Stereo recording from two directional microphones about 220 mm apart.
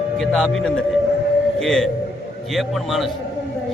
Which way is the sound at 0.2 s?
5° left (ahead or behind).